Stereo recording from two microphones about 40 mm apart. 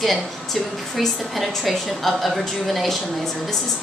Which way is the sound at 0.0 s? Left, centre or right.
Centre.